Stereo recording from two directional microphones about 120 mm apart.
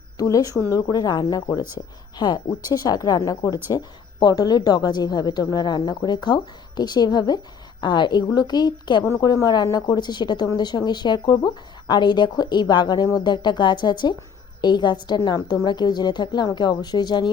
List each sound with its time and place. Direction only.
0.2 s a woman's voice: 30° left (ahead or behind)
9.0 s a woman's voice: 25° left (ahead or behind)